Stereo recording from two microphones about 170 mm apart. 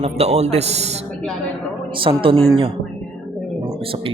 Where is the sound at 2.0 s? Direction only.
30° right (ahead or behind).